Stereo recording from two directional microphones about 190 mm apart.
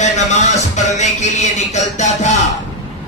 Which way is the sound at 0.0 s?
40° left (ahead or behind).